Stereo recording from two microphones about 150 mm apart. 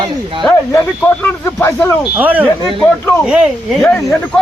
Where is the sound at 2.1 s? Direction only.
10° right (ahead or behind).